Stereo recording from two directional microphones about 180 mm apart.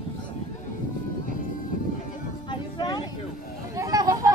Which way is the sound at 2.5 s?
25° left (ahead or behind).